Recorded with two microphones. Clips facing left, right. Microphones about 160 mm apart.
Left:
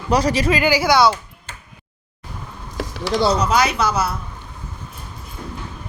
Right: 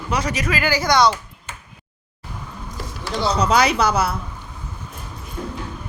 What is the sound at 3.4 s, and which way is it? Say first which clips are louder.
Speech: right 1 dB; 30° right (ahead or behind).